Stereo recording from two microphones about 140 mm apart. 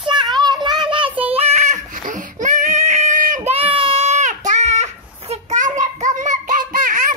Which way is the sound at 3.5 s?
40° right (ahead or behind).